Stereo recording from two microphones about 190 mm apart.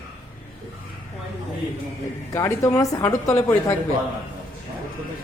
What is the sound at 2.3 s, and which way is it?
Speech, 15° left (ahead or behind).